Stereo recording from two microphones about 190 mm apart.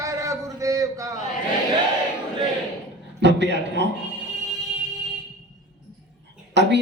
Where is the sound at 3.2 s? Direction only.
65° right (ahead or behind).